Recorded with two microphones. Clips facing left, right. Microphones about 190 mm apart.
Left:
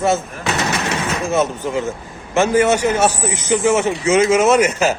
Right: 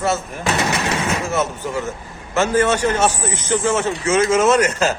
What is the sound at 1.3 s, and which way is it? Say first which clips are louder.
A man's voice: left 3 dB; 15° left (ahead or behind).